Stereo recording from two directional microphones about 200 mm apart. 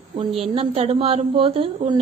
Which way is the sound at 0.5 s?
30° right (ahead or behind).